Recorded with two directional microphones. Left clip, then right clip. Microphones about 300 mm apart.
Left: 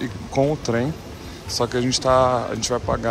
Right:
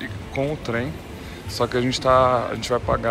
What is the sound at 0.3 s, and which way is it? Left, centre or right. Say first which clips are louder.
Speech: left 5 dB; centre.